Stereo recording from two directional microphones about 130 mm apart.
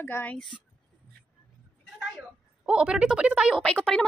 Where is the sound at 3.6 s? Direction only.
5° left (ahead or behind).